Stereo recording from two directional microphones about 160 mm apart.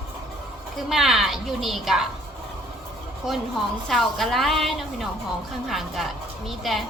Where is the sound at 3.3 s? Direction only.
Centre (ahead or behind).